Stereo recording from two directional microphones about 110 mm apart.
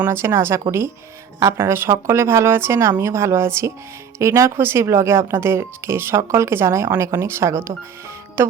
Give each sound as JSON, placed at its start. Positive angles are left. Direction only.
{"t": 0.0, "sound": "speech", "side_deg": -25}